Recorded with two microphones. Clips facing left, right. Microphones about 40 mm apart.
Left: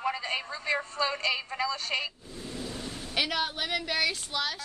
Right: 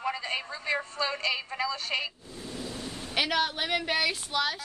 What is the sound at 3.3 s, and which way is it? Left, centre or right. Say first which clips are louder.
Speech: right 3 dB; right.